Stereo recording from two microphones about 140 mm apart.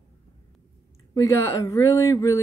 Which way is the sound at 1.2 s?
20° left (ahead or behind).